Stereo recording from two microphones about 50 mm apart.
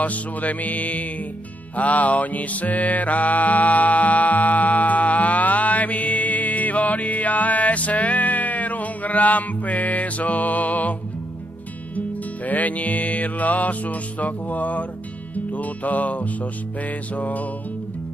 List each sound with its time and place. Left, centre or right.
0.0 s music: left
12.4 s music: left